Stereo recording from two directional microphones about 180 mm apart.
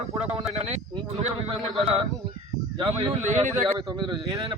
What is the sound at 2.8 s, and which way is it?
Speech, 25° right (ahead or behind).